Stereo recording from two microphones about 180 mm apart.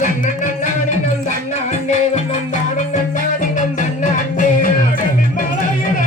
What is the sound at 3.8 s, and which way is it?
Music, 45° left (ahead or behind).